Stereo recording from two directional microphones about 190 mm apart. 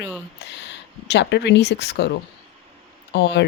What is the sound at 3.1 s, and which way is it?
Speech, 65° left (ahead or behind).